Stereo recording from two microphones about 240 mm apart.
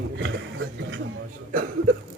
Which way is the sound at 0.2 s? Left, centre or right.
Right.